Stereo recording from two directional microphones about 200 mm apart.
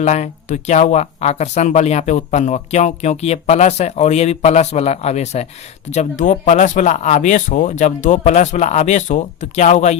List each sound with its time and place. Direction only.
0.0 s speech: 35° left (ahead or behind)